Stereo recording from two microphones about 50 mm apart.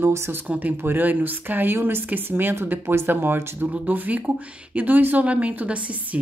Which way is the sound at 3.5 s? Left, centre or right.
Right.